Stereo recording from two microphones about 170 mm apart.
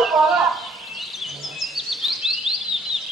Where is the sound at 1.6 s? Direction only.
Centre (ahead or behind).